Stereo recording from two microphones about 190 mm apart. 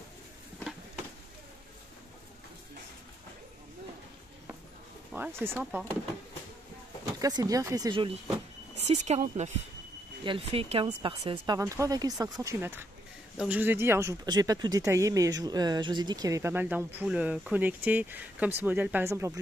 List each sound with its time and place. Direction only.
5.1 s speech: 10° right (ahead or behind)
7.2 s speech: 20° right (ahead or behind)
8.7 s speech: 35° right (ahead or behind); by 19.4 s 15° right (ahead or behind)